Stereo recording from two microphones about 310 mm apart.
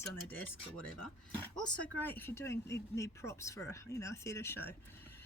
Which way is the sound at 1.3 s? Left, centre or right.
Centre.